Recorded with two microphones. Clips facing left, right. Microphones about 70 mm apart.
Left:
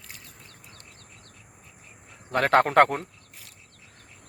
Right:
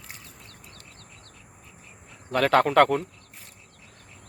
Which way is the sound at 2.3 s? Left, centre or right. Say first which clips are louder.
Even; left.